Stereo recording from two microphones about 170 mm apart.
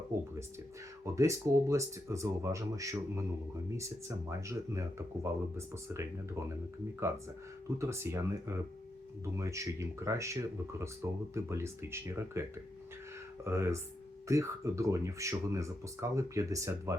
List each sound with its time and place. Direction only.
1.0 s speech: 15° right (ahead or behind)